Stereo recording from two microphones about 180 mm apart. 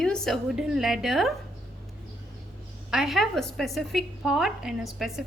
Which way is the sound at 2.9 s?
Centre (ahead or behind).